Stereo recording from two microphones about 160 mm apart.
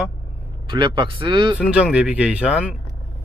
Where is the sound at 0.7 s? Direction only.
30° right (ahead or behind).